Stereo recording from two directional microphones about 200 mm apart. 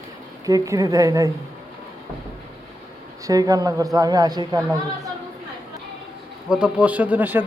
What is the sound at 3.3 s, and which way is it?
Speech, 15° right (ahead or behind).